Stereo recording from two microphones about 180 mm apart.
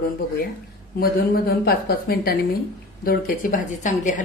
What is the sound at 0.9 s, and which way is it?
A woman's voice, 60° left (ahead or behind).